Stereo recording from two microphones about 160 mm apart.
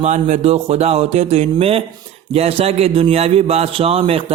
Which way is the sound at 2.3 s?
40° right (ahead or behind).